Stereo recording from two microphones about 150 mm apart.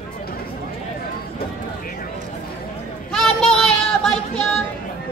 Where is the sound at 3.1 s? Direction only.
5° left (ahead or behind).